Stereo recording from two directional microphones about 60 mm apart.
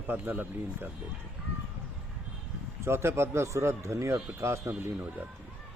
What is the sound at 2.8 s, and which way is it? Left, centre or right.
Speech, right.